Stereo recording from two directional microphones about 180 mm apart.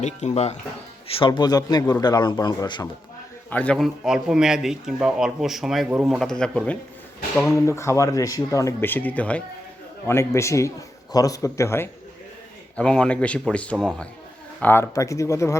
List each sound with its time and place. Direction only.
0.0 s speech: 40° left (ahead or behind)
1.1 s speech: 25° left (ahead or behind)
3.5 s speech: 5° left (ahead or behind)
7.5 s speech: 15° left (ahead or behind)